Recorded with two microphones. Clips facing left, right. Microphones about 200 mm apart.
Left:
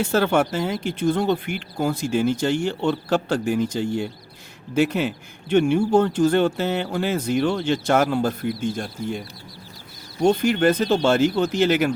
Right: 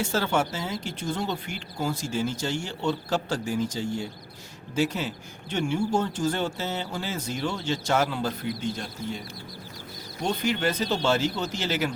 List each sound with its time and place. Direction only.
0.0 s speech: 60° left (ahead or behind)
10.2 s speech: 50° left (ahead or behind)